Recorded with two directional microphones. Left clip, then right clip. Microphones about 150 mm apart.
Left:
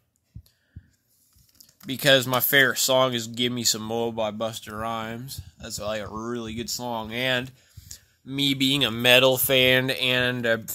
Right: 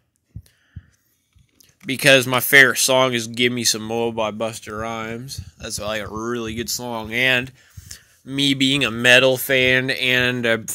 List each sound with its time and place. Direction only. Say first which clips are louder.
1.9 s speech: right 5 dB; 15° right (ahead or behind)
5.6 s speech: right 4 dB; 20° right (ahead or behind)
9.0 s speech: right 4 dB; centre (ahead or behind)